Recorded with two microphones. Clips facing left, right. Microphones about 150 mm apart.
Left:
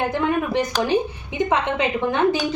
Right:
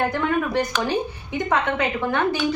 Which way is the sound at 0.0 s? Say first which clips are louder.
Left 1 dB; 15° left (ahead or behind).